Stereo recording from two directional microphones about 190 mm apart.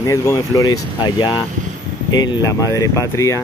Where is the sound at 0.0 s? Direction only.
15° left (ahead or behind).